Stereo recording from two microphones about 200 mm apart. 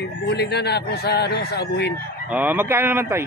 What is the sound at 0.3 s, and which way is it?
Speech, 55° left (ahead or behind).